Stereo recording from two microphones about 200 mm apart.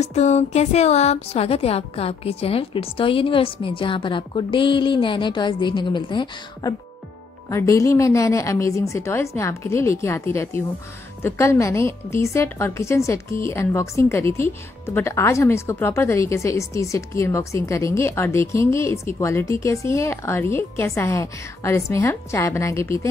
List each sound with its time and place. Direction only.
0.0 s speech: 35° left (ahead or behind); by 23.0 s 15° left (ahead or behind)